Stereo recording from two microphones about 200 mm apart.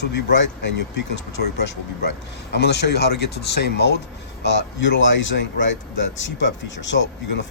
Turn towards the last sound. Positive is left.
turn(degrees=65)  # may be behind; listen again after turning